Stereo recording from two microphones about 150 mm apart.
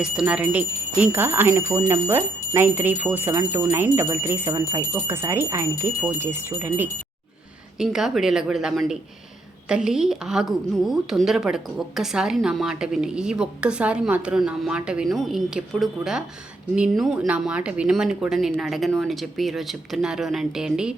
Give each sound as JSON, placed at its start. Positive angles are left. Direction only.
{"t": 0.0, "sound": "speech", "side_deg": -5}
{"t": 7.8, "sound": "a woman's voice", "side_deg": -5}